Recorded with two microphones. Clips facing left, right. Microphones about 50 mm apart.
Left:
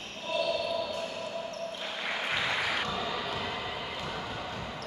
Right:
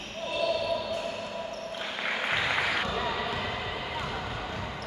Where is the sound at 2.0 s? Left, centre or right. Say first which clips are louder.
Right 3 dB; right.